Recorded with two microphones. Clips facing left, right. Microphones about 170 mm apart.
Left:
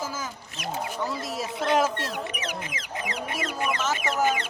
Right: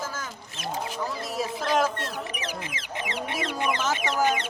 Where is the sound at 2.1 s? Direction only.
30° right (ahead or behind).